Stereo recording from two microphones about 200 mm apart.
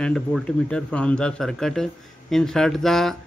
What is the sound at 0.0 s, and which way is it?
A man's voice, 5° left (ahead or behind).